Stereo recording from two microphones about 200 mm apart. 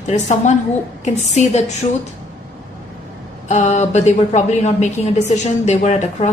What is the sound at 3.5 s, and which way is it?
A woman's voice, 35° left (ahead or behind).